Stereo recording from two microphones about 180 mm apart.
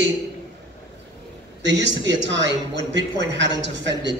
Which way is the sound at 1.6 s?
80° right.